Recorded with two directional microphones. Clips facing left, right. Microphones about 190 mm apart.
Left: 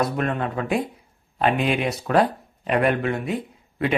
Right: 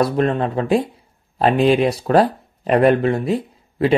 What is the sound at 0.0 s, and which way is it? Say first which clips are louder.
Speech: right 6 dB; 30° right (ahead or behind).